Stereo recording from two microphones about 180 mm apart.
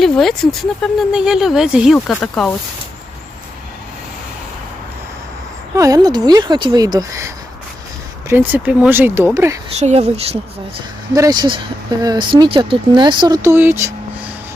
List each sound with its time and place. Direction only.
0.0 s speech: centre (ahead or behind)
5.7 s speech: 20° right (ahead or behind)
9.7 s speech: 35° right (ahead or behind)
11.1 s speech: 20° right (ahead or behind)